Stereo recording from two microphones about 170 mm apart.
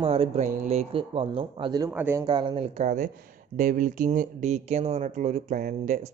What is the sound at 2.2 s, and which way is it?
Speech, 25° right (ahead or behind).